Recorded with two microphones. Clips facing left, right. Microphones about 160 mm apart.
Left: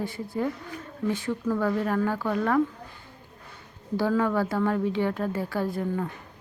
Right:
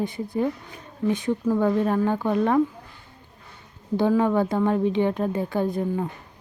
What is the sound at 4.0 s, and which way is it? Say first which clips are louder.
A woman's voice: right 4 dB; 20° right (ahead or behind).